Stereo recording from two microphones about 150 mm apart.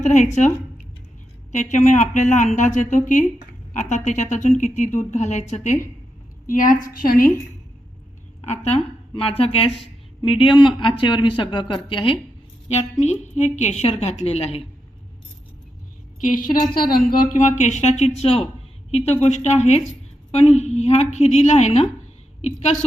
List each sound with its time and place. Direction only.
0.0 s speech: 50° left (ahead or behind)
1.5 s speech: 50° left (ahead or behind)
6.5 s speech: 65° left (ahead or behind)
8.4 s a woman's voice: 45° left (ahead or behind)
12.6 s speech: 50° left (ahead or behind)
16.2 s a woman's voice: 65° left (ahead or behind); by 22.8 s 45° left (ahead or behind)